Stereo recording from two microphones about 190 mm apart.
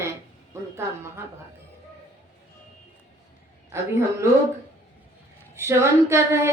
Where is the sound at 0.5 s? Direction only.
15° right (ahead or behind).